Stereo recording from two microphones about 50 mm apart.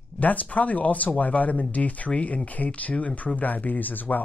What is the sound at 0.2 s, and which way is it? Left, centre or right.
Speech, left.